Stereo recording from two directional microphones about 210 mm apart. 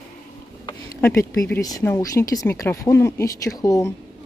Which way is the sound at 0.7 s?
10° left (ahead or behind).